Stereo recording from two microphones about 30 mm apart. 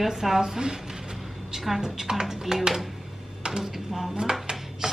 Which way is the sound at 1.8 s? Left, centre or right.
Right.